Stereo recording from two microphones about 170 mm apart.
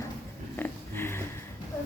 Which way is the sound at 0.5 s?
10° left (ahead or behind).